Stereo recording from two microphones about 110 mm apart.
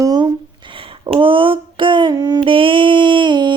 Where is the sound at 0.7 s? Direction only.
55° right (ahead or behind); by 2.4 s 35° right (ahead or behind).